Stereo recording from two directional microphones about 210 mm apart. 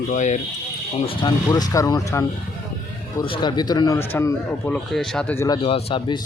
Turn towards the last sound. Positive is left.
turn(degrees=25)  # may be behind; listen again after turning